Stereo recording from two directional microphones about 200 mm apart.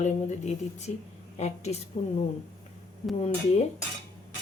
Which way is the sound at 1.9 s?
30° left (ahead or behind).